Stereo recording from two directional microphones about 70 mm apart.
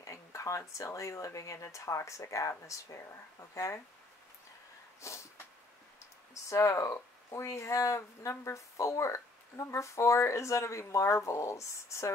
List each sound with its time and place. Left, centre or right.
0.0 s speech: left
5.0 s speech: left
6.5 s speech: left